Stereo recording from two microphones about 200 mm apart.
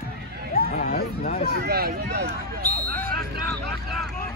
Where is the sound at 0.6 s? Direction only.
45° left (ahead or behind).